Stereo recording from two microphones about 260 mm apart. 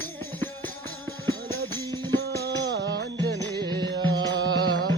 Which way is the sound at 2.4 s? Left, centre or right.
Right.